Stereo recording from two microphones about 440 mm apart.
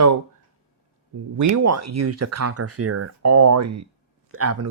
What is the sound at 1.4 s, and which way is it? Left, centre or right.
Speech, right.